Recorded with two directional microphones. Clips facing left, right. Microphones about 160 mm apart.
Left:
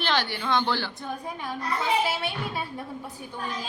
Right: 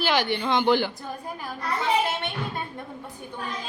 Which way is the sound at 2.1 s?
5° left (ahead or behind).